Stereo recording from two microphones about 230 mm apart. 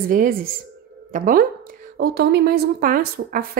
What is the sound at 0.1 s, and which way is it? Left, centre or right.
A woman's voice, right.